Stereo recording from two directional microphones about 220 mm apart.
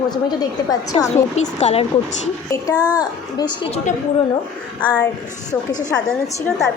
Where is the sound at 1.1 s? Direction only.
30° left (ahead or behind).